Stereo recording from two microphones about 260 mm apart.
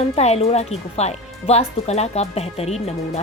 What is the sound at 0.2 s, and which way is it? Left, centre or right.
Speech, left.